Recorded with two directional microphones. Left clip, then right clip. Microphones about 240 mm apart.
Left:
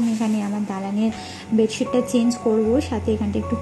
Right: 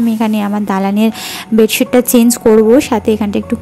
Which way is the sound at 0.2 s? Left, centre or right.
Right.